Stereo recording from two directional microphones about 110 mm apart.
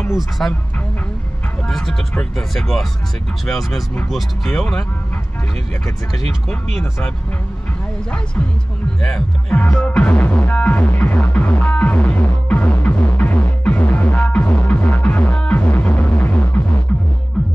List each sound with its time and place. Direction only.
0.1 s speech: centre (ahead or behind)
1.7 s speech: 5° left (ahead or behind)
6.1 s speech: 5° left (ahead or behind)
9.0 s music: 5° left (ahead or behind)
17.4 s music: centre (ahead or behind)